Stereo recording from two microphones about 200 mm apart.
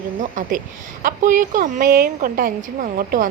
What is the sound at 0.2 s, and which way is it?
A woman's voice, 40° right (ahead or behind).